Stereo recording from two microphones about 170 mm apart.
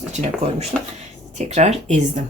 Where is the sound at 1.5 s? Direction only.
40° right (ahead or behind).